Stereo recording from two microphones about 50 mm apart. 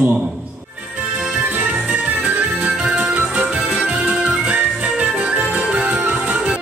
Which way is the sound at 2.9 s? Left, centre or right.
Right.